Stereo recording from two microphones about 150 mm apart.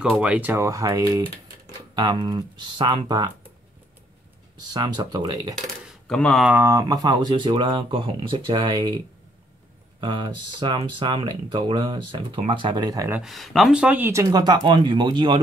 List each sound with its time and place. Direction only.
0.0 s speech: 5° right (ahead or behind); by 3.3 s 30° right (ahead or behind)
4.6 s speech: 30° right (ahead or behind)
6.0 s speech: 5° left (ahead or behind)
6.4 s speech: 15° right (ahead or behind)
13.1 s speech: centre (ahead or behind); by 15.3 s 30° right (ahead or behind)